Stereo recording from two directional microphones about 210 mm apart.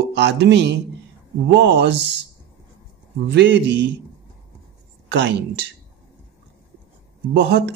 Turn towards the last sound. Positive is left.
turn(degrees=-55)  # may be behind; listen again after turning